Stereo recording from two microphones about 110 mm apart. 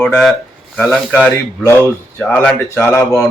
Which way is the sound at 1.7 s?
20° left (ahead or behind).